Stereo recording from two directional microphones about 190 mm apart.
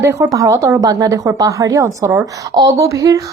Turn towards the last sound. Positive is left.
turn(degrees=-15)  # may be behind; listen again after turning